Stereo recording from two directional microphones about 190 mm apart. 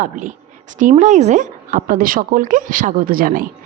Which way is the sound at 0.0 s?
45° right (ahead or behind).